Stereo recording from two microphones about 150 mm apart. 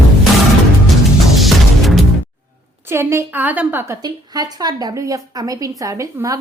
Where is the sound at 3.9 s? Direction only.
25° right (ahead or behind).